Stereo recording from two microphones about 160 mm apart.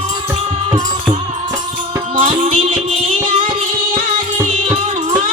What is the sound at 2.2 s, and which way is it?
Music, 45° right (ahead or behind).